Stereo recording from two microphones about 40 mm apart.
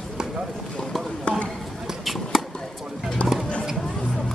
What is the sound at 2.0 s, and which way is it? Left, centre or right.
Basketball bounce, centre.